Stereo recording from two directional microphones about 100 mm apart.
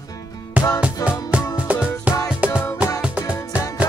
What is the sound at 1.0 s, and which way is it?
Music, 35° left (ahead or behind).